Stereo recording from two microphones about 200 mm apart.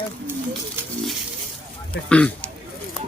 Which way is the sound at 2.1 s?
5° left (ahead or behind).